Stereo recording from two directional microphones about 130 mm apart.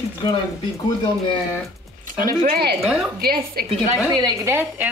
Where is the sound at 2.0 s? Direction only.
90° right.